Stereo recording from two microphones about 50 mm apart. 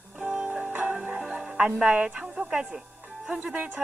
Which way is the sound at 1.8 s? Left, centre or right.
Centre.